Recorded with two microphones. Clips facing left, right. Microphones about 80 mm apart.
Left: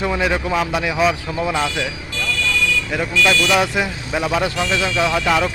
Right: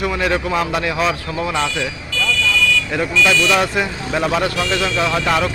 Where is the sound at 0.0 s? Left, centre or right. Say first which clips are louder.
Even; left.